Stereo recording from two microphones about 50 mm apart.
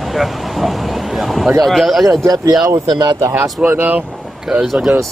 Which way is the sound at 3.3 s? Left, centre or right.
Right.